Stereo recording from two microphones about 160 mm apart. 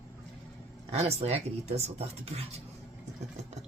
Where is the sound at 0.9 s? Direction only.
40° right (ahead or behind).